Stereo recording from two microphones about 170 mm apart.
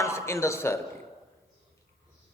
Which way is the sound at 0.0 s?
15° left (ahead or behind).